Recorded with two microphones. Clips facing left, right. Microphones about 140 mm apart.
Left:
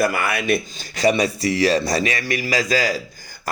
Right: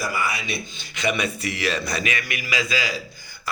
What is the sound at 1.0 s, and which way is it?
Speech, 35° left (ahead or behind).